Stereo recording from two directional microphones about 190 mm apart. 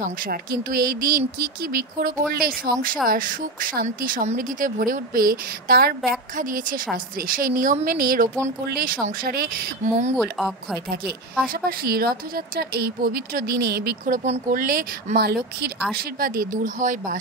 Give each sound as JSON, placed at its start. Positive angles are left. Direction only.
{"t": 0.0, "sound": "speech", "side_deg": -50}
{"t": 10.1, "sound": "speech", "side_deg": 0}
{"t": 11.4, "sound": "speech", "side_deg": -50}
{"t": 14.6, "sound": "speech", "side_deg": -50}